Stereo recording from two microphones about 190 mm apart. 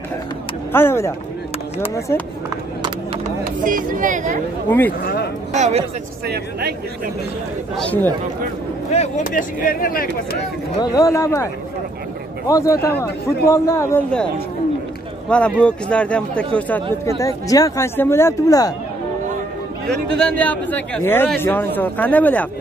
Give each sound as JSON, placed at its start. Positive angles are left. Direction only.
{"t": 0.7, "sound": "speech", "side_deg": 15}
{"t": 3.3, "sound": "speech", "side_deg": -45}
{"t": 4.6, "sound": "speech", "side_deg": 10}
{"t": 5.0, "sound": "speech", "side_deg": 55}
{"t": 5.5, "sound": "speech", "side_deg": -35}
{"t": 6.2, "sound": "speech", "side_deg": -55}
{"t": 7.7, "sound": "speech", "side_deg": 5}
{"t": 8.9, "sound": "speech", "side_deg": 40}
{"t": 10.8, "sound": "speech", "side_deg": 15}
{"t": 12.4, "sound": "speech", "side_deg": 15}
{"t": 15.2, "sound": "speech", "side_deg": 5}
{"t": 19.9, "sound": "speech", "side_deg": 5}